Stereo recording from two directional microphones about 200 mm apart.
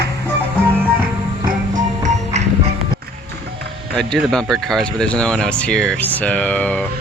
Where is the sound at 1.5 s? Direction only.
40° right (ahead or behind).